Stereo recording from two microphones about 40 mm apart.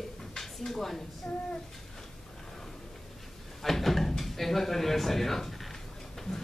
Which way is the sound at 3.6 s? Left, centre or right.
Centre.